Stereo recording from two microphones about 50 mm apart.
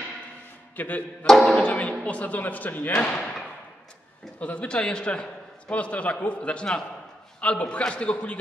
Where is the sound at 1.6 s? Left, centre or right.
Left.